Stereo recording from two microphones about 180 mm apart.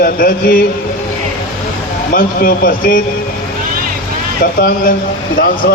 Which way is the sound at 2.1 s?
55° left (ahead or behind).